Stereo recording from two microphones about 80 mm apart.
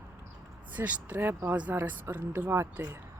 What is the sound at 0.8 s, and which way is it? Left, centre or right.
Speech, right.